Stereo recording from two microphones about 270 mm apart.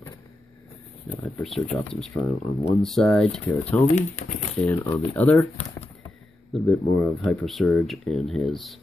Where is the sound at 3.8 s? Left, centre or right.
Left.